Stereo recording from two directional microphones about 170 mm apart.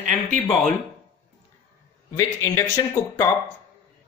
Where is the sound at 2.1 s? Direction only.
20° left (ahead or behind).